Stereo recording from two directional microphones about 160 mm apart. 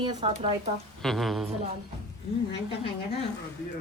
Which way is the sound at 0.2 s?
35° right (ahead or behind).